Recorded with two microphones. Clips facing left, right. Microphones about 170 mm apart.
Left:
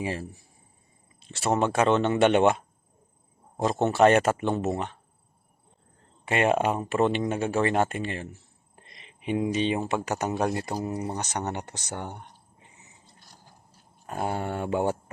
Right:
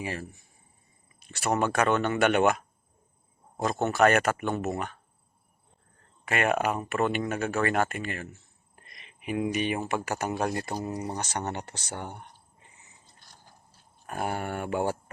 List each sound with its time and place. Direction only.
0.0 s speech: 30° left (ahead or behind)
6.2 s speech: 25° left (ahead or behind)
14.1 s speech: 20° left (ahead or behind)